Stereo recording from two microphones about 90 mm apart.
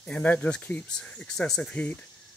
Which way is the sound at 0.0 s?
15° left (ahead or behind).